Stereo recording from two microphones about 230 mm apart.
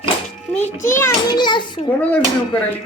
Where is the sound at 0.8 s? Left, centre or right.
Centre.